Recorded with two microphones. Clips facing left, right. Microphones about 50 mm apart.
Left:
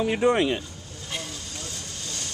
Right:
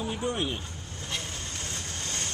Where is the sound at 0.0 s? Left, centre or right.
Left.